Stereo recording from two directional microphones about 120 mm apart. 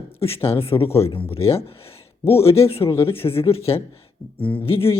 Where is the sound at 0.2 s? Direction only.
50° left (ahead or behind).